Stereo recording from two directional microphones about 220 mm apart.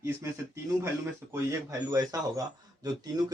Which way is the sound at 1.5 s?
15° right (ahead or behind).